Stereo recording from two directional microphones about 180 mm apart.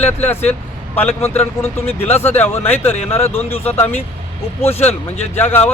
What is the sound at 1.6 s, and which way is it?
Speech, 35° left (ahead or behind).